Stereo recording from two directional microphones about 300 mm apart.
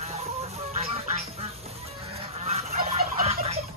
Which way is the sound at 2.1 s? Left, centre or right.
Centre.